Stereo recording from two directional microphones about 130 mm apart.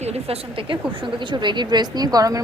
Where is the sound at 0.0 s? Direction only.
50° right (ahead or behind).